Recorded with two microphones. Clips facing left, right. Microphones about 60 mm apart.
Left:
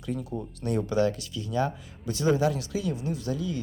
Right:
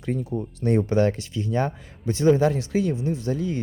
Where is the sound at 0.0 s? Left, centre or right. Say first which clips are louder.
Right 5 dB; right.